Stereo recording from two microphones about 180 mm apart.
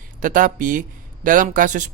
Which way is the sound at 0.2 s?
50° right (ahead or behind).